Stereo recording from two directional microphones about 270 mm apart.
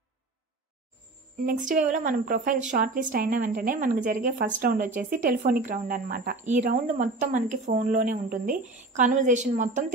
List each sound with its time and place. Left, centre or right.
1.4 s a woman's voice: right